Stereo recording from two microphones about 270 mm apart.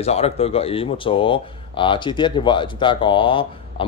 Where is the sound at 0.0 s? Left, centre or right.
Left.